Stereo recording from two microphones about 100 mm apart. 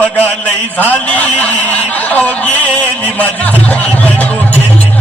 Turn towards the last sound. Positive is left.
turn(degrees=15)  # may be behind; listen again after turning